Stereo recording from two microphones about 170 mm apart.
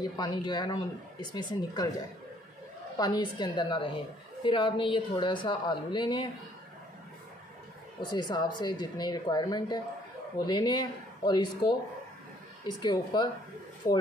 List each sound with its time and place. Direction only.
0.2 s a woman's voice: 25° left (ahead or behind)
8.0 s a woman's voice: 25° left (ahead or behind)